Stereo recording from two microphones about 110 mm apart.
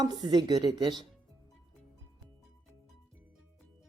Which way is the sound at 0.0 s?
40° right (ahead or behind).